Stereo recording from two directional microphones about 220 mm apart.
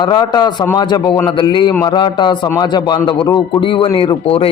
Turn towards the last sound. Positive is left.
turn(degrees=25)  # may be behind; listen again after turning